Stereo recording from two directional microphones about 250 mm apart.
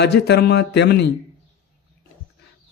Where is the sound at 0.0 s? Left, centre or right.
Left.